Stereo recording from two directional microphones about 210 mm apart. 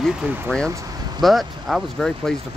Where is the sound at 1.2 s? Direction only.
Centre (ahead or behind).